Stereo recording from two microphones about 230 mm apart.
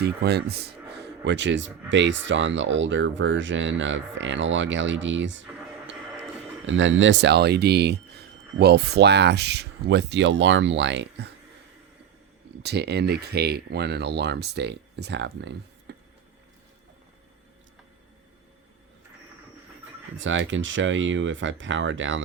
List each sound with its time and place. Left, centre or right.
0.0 s speech: right
6.7 s speech: right
12.6 s speech: right
20.1 s speech: right